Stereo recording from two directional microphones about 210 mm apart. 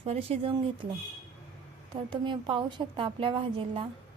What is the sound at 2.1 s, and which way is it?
A woman's voice, 25° right (ahead or behind).